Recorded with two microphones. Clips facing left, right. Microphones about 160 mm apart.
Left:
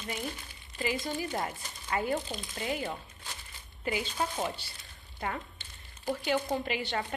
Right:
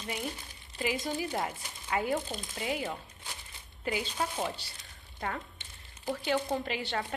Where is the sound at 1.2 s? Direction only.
5° right (ahead or behind).